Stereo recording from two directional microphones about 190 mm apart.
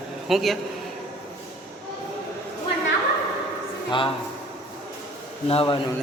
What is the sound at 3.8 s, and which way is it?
Speech, 25° left (ahead or behind).